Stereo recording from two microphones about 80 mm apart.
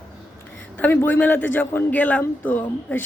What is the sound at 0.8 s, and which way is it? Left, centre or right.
Speech, left.